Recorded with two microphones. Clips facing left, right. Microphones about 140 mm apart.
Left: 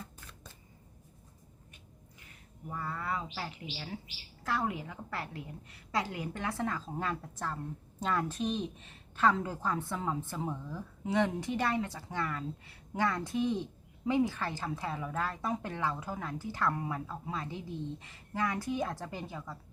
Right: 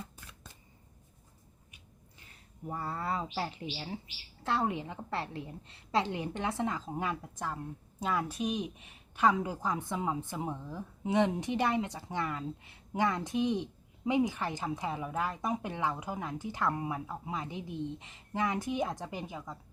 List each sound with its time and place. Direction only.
2.6 s a woman's voice: 30° right (ahead or behind)